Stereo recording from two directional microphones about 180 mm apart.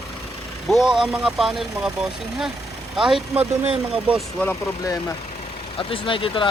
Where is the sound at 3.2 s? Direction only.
35° right (ahead or behind).